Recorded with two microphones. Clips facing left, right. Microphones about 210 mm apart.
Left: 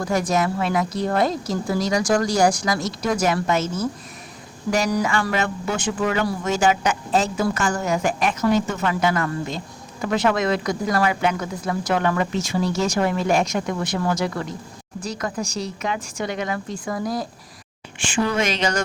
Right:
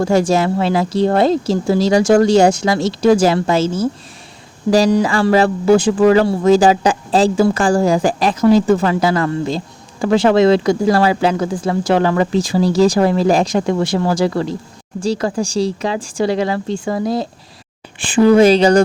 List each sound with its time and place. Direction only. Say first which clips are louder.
0.0 s speech: right 7 dB; 30° right (ahead or behind)